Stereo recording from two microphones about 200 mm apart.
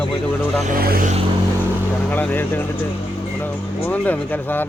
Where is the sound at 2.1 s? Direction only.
10° left (ahead or behind).